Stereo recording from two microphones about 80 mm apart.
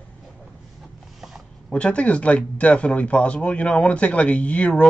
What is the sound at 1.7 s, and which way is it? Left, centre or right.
Speech, centre.